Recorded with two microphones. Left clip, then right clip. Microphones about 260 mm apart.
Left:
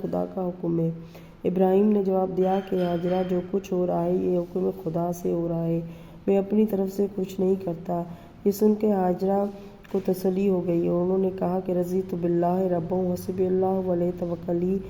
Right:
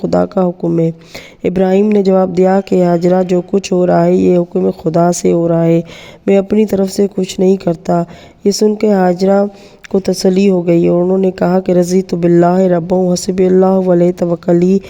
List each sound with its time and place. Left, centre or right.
0.1 s speech: right
3.0 s speech: right